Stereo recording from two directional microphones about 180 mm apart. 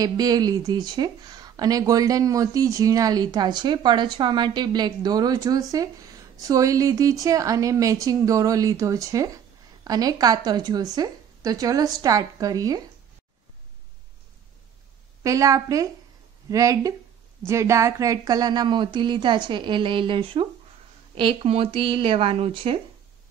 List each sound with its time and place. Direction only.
0.0 s speech: 20° right (ahead or behind)
15.2 s a woman's voice: 20° right (ahead or behind)